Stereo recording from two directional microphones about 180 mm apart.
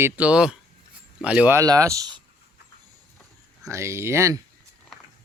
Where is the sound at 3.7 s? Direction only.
15° right (ahead or behind).